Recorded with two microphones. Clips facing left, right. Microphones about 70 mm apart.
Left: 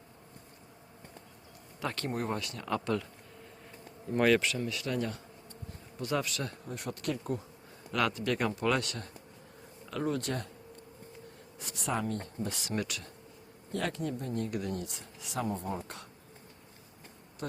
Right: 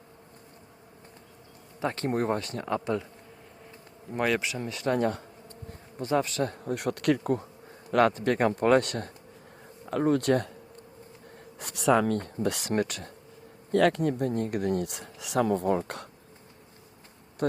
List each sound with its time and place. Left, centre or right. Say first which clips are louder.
1.8 s speech: right 5 dB; right
2.0 s speech: right 8 dB; right
2.6 s speech: right 2 dB; right
4.1 s speech: left 2 dB; centre
4.5 s speech: right 5 dB; right
6.0 s speech: right 6 dB; right
6.7 s speech: right 10 dB; right
7.9 s speech: right 7 dB; right
12.6 s speech: right 7 dB; right
13.7 s speech: right 11 dB; right
17.4 s bee: right 12 dB; right